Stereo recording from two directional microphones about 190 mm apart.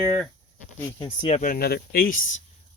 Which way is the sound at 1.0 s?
30° left (ahead or behind).